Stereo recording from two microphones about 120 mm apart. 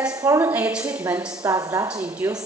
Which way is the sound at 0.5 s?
10° right (ahead or behind).